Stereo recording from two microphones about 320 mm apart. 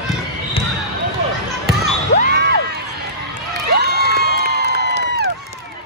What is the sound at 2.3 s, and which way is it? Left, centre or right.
Cheering, right.